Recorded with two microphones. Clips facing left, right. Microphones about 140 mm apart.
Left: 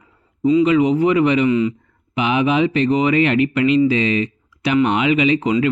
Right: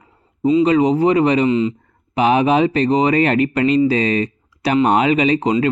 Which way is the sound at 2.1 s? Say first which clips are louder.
Right 3 dB; 40° right (ahead or behind).